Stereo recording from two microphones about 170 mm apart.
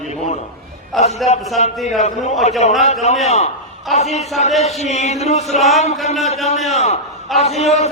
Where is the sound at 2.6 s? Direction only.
40° left (ahead or behind).